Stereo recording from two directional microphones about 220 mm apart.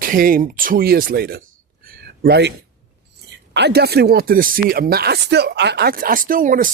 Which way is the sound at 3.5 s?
50° right (ahead or behind).